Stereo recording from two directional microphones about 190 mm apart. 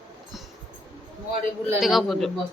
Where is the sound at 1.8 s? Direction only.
Centre (ahead or behind).